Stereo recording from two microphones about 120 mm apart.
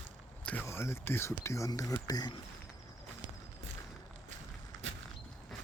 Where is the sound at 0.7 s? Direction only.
20° left (ahead or behind).